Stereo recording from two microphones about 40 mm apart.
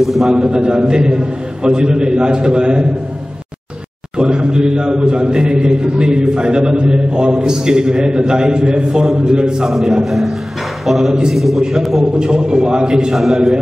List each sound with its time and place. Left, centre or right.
0.0 s a man's voice: centre
0.5 s a man's voice: right
4.2 s a man's voice: right
9.7 s a man's voice: centre
12.2 s a man's voice: centre
13.1 s a man's voice: centre